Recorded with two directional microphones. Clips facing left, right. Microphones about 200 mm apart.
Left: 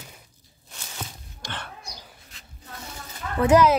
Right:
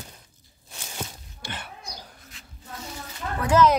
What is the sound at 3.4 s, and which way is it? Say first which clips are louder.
Speech: left 7 dB; 25° left (ahead or behind).